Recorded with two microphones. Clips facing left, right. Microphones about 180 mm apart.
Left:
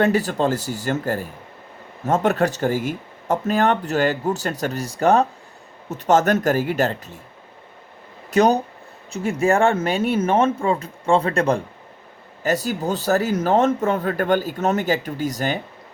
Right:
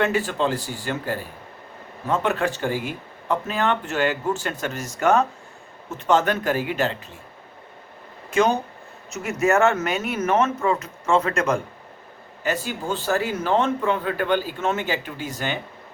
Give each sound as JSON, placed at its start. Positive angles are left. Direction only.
{"t": 0.0, "sound": "speech", "side_deg": 40}
{"t": 8.3, "sound": "speech", "side_deg": 40}